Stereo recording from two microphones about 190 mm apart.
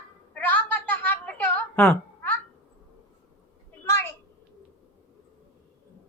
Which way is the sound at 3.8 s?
10° left (ahead or behind).